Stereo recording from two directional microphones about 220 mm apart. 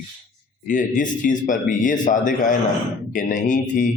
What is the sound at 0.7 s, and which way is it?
Speech, 35° left (ahead or behind).